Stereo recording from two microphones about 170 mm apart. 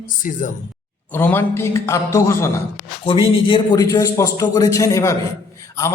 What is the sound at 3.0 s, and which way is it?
A man's voice, 30° left (ahead or behind).